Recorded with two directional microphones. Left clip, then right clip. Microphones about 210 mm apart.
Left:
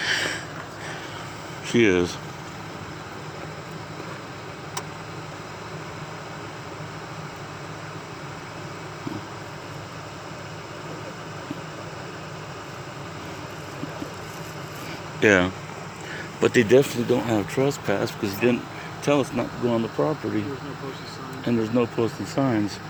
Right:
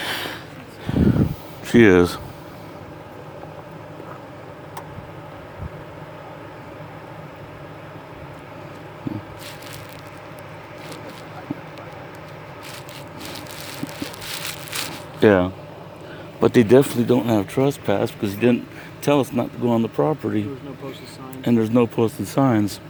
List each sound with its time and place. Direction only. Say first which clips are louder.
0.0 s a sound: left 2 dB; 30° right (ahead or behind)
1.6 s speech: right 6 dB; 40° right (ahead or behind)
15.2 s speech: right 3 dB; 20° right (ahead or behind); by 20.4 s 40° right (ahead or behind)
21.4 s speech: right 5 dB; 45° right (ahead or behind)